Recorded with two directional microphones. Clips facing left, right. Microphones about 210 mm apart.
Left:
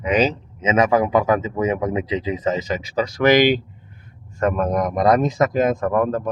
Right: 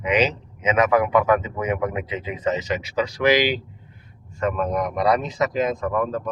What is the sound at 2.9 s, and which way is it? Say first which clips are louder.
Speech: left 4 dB; 40° left (ahead or behind).